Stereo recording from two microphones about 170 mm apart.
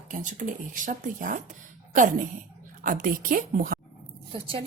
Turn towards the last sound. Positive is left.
turn(degrees=-30)  # may be behind; listen again after turning